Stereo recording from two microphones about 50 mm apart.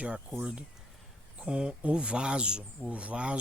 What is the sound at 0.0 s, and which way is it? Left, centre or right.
Speech, right.